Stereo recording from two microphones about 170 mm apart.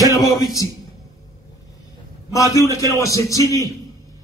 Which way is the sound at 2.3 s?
20° left (ahead or behind).